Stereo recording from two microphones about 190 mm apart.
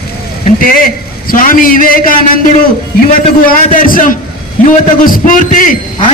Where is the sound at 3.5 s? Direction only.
45° left (ahead or behind).